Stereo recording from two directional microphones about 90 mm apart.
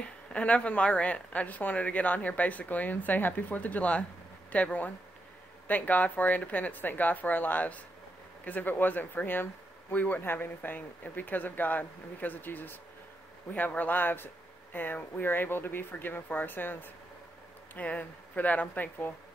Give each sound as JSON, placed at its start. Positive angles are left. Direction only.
{"t": 0.0, "sound": "speech", "side_deg": 15}